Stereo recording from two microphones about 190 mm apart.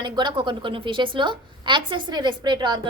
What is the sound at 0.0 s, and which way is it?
A woman's voice, 25° right (ahead or behind).